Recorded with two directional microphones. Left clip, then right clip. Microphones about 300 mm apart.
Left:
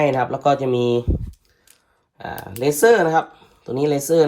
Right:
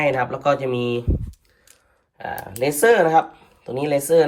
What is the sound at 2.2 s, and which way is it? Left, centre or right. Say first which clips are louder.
Speech: right 1 dB; left.